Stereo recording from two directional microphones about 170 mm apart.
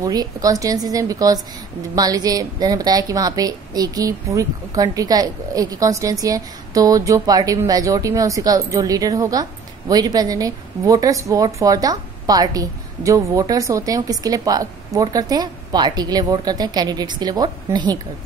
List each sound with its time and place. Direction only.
0.0 s a woman's voice: 20° right (ahead or behind)